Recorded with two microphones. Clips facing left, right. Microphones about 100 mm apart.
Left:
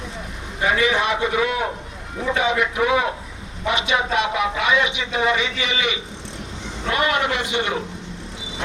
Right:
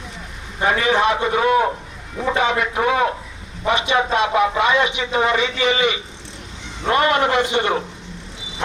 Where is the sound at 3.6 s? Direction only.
40° right (ahead or behind).